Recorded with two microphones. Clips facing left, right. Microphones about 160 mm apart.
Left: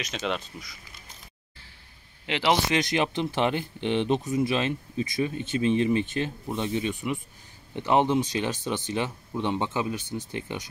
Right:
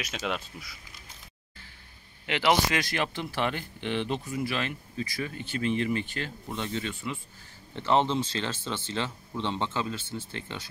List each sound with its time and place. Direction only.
0.0 s speech: 5° right (ahead or behind)
2.2 s speech: 25° left (ahead or behind)